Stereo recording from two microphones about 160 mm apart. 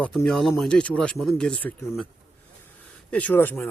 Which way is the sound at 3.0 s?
10° left (ahead or behind).